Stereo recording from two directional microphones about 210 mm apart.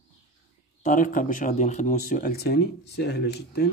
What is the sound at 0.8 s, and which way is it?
Speech, 40° left (ahead or behind).